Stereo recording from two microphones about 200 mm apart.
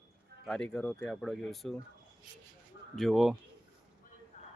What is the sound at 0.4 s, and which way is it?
Speech, 5° left (ahead or behind).